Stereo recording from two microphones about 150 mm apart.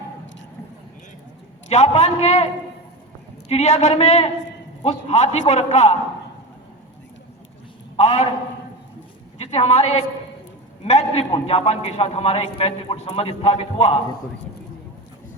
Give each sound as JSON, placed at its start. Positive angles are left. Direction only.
{"t": 1.7, "sound": "a man's voice", "side_deg": 45}
{"t": 3.5, "sound": "a man's voice", "side_deg": 50}
{"t": 7.9, "sound": "a man's voice", "side_deg": 45}
{"t": 9.4, "sound": "a woman's voice", "side_deg": 45}